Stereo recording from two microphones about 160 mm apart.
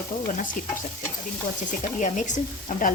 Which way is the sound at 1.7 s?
50° left (ahead or behind).